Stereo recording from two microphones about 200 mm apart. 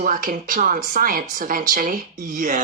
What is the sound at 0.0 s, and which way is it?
Speech, 40° right (ahead or behind).